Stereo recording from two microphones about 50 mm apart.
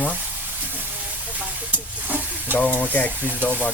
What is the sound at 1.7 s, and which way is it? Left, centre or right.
Hiss, right.